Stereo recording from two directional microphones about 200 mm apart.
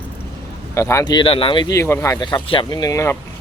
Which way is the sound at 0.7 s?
15° left (ahead or behind).